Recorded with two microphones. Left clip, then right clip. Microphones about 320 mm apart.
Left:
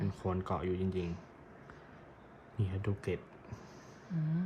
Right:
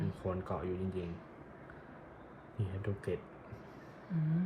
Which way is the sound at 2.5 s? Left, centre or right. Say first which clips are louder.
Left 2 dB; centre.